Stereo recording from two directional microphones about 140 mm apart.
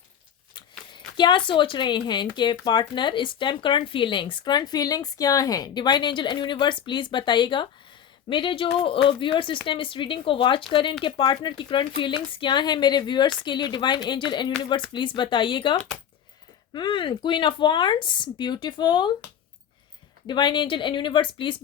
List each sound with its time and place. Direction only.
0.5 s speech: 35° left (ahead or behind)
20.2 s speech: 35° left (ahead or behind)